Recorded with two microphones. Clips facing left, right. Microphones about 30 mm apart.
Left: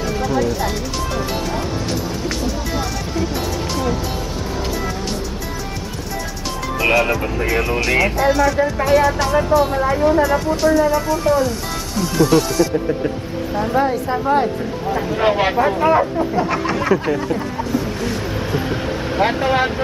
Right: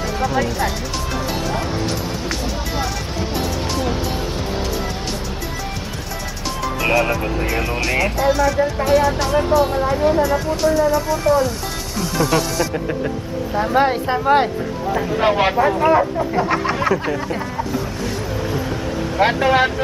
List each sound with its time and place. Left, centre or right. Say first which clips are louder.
0.2 s speech: even; centre
1.5 s music: even; centre
6.8 s speech: left 2 dB; centre
13.7 s speech: right 2 dB; right
14.9 s speech: even; centre
17.6 s a sound: left 2 dB; centre
18.5 s vehicle: left 2 dB; centre
19.2 s speech: right 2 dB; centre